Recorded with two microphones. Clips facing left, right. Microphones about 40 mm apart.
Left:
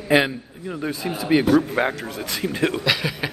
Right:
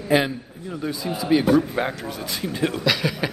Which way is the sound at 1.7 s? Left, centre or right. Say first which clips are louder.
Left 3 dB; left.